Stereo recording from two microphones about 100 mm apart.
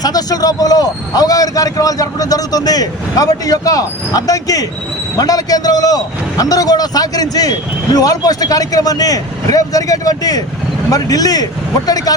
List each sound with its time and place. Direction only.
0.0 s a man's voice: 40° left (ahead or behind)